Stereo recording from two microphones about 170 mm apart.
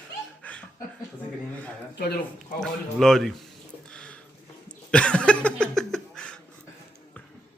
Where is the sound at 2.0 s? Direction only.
65° left (ahead or behind).